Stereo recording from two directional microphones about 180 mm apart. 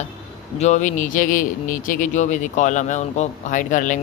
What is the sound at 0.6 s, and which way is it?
A man's voice, 40° left (ahead or behind).